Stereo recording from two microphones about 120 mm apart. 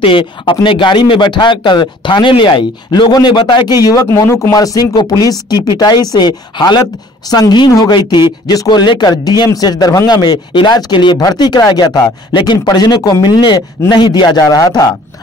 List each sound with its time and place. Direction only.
0.0 s speech: 45° left (ahead or behind)
4.1 s speech: 25° left (ahead or behind)